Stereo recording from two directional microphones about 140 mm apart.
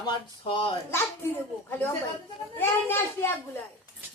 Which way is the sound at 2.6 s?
15° left (ahead or behind).